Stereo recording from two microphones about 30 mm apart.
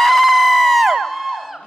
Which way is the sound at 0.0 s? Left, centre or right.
Centre.